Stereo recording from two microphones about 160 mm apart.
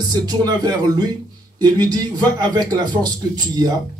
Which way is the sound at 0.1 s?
25° right (ahead or behind).